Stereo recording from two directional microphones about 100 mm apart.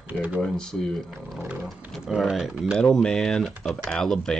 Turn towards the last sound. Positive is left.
turn(degrees=5)  # may be behind; listen again after turning